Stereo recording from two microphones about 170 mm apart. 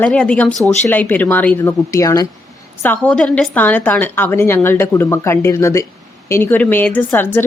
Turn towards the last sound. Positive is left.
turn(degrees=10)  # may be behind; listen again after turning